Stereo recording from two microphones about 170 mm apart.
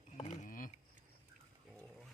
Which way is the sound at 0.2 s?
50° left (ahead or behind).